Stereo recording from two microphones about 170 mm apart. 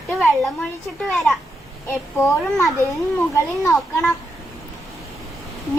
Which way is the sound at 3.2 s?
15° left (ahead or behind).